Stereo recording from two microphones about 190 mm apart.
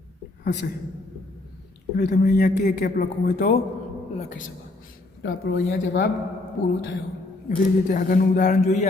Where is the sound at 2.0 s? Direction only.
45° left (ahead or behind).